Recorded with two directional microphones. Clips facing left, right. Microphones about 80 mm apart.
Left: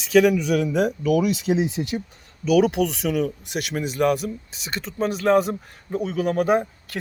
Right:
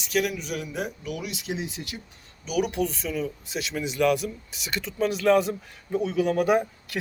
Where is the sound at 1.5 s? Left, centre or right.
Left.